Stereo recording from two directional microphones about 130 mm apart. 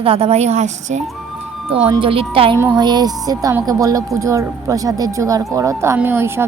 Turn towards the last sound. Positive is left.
turn(degrees=-20)  # may be behind; listen again after turning